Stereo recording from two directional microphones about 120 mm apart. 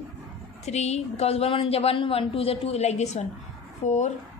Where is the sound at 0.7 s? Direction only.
65° left (ahead or behind).